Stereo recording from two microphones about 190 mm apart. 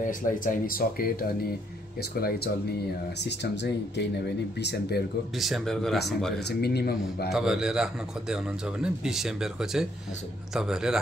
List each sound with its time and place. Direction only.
0.0 s speech: 45° left (ahead or behind); by 5.0 s 60° left (ahead or behind)
5.4 s speech: centre (ahead or behind)
6.4 s speech: 60° left (ahead or behind)
7.3 s speech: 5° right (ahead or behind)